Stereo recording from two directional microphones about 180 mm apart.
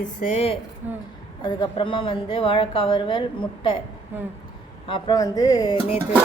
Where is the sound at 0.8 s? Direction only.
10° right (ahead or behind).